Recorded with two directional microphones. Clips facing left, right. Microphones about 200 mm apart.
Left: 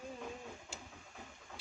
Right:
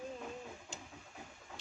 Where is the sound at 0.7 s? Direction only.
5° left (ahead or behind).